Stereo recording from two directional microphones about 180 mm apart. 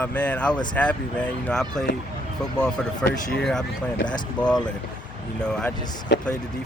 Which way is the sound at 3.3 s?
5° left (ahead or behind).